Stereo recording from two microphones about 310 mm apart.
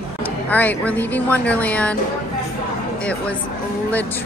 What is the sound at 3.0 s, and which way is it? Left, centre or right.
Speech, centre.